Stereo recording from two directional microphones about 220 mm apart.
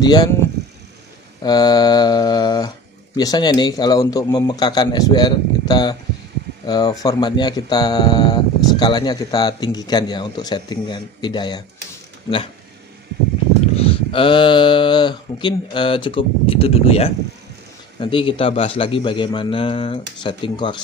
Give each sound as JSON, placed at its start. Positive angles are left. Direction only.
{"t": 0.0, "sound": "mantra", "side_deg": 20}
{"t": 1.4, "sound": "mantra", "side_deg": 20}
{"t": 3.2, "sound": "speech", "side_deg": 20}
{"t": 13.7, "sound": "speech", "side_deg": 25}